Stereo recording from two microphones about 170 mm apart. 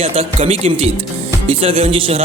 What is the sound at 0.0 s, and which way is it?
A man's voice, 35° right (ahead or behind).